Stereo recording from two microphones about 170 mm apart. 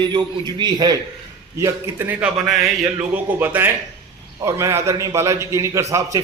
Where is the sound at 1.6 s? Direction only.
10° right (ahead or behind).